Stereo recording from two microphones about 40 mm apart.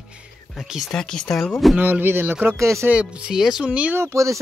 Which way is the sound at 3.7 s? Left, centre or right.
Right.